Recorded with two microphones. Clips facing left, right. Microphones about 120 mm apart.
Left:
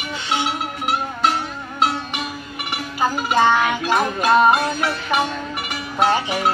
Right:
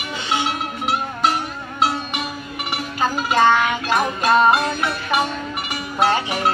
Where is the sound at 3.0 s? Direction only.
10° left (ahead or behind).